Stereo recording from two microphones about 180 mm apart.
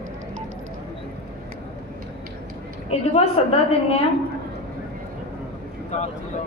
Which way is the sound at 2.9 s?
35° left (ahead or behind).